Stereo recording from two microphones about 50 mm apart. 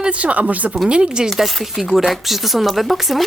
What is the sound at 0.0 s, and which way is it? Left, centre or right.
Speech, right.